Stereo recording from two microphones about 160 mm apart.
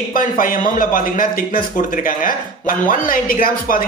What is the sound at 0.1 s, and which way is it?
Speech, 60° left (ahead or behind).